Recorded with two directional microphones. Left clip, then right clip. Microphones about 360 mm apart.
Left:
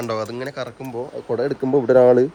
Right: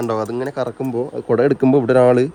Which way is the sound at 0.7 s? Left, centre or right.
Right.